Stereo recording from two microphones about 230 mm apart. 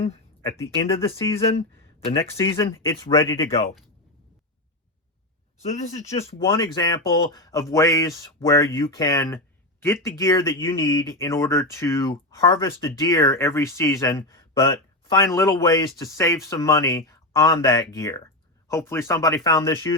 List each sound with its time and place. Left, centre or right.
0.4 s speech: centre
0.9 s speech: left
2.1 s speech: centre
5.8 s speech: left
6.4 s speech: centre